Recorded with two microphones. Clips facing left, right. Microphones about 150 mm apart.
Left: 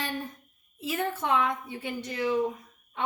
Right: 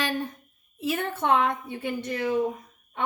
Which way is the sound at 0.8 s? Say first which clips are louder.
Right 3 dB; 65° right (ahead or behind).